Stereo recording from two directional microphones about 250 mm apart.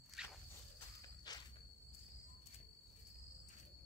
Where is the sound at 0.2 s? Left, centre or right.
Centre.